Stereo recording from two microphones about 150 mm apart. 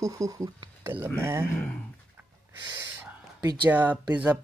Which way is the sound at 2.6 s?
25° right (ahead or behind).